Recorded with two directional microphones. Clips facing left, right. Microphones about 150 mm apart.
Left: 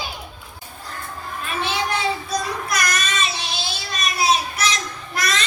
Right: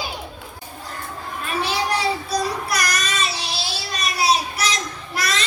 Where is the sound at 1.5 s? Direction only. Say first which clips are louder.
Right 1 dB; 35° right (ahead or behind).